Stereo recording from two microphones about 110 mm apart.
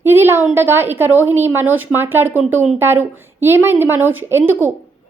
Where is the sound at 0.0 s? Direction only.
20° right (ahead or behind).